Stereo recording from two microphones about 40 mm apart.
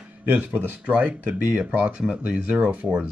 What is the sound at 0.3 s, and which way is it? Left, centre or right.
Speech, right.